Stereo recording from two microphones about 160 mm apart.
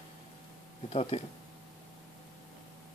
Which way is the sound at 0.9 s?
35° left (ahead or behind).